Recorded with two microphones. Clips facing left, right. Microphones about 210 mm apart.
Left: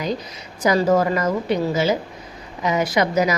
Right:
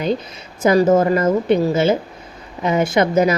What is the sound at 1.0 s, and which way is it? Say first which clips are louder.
Speech: right 5 dB; 30° right (ahead or behind).